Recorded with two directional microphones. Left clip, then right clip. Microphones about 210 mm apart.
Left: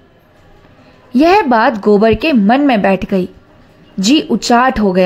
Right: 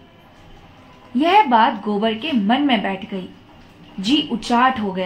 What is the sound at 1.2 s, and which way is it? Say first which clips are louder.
A woman's voice: left 4 dB; 40° left (ahead or behind).